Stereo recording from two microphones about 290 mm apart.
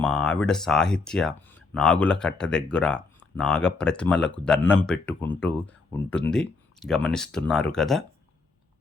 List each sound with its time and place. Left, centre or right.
0.0 s speech: centre